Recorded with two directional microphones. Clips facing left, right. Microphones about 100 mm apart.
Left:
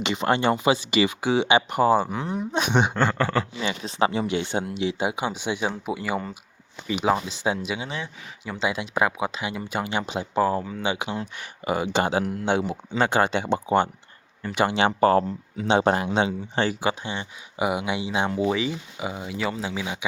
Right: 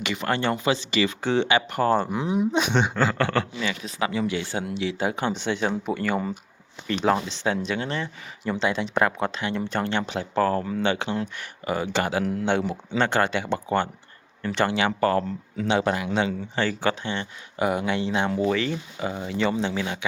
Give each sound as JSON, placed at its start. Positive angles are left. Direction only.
{"t": 0.0, "sound": "speech", "side_deg": 20}
{"t": 1.9, "sound": "speech", "side_deg": 0}
{"t": 2.6, "sound": "speech", "side_deg": 10}
{"t": 3.6, "sound": "speech", "side_deg": 25}
{"t": 14.8, "sound": "speech", "side_deg": 25}
{"t": 16.1, "sound": "speech", "side_deg": 20}